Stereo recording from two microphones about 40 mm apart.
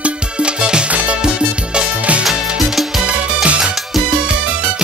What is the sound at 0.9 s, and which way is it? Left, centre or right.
Music, right.